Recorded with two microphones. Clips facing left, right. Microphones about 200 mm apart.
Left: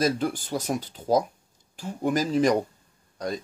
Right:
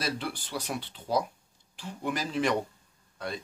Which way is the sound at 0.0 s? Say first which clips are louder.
Left 9 dB; 45° left (ahead or behind).